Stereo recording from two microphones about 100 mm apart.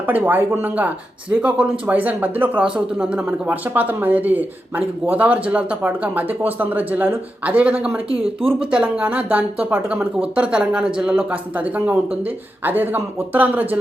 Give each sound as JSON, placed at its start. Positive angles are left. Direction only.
{"t": 0.0, "sound": "speech", "side_deg": -20}